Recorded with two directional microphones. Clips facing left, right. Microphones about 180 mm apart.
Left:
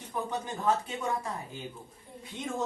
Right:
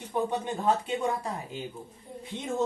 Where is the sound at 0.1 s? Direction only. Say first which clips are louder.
Right 5 dB; 25° right (ahead or behind).